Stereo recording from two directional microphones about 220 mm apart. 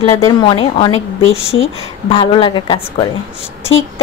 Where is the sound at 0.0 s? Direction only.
20° left (ahead or behind).